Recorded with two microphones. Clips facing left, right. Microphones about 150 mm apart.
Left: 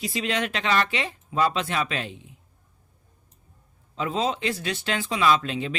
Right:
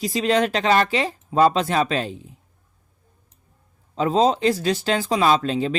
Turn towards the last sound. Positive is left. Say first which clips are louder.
# right 4 dB
turn(degrees=-35)  # may be behind; listen again after turning